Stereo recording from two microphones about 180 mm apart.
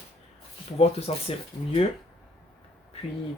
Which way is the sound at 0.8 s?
35° left (ahead or behind).